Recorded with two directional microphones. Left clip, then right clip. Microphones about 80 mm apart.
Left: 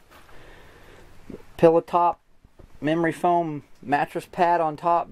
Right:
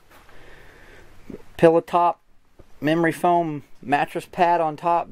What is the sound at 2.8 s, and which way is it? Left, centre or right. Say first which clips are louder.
Speech: right 2 dB; right.